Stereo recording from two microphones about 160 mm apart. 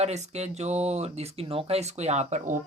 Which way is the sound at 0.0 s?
45° right (ahead or behind).